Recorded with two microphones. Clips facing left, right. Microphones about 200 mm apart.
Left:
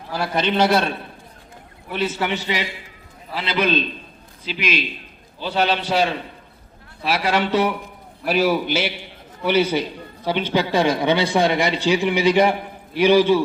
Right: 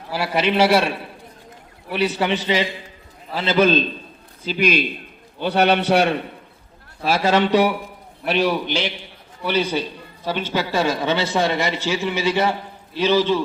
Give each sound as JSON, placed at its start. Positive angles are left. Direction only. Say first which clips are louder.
{"t": 0.1, "sound": "a man's voice", "louder": "right 1 dB", "side_deg": -5}
{"t": 3.3, "sound": "a man's voice", "louder": "right 4 dB", "side_deg": -45}
{"t": 7.3, "sound": "a man's voice", "louder": "right 3 dB", "side_deg": -15}
{"t": 8.2, "sound": "a man's voice", "louder": "left 1 dB", "side_deg": 0}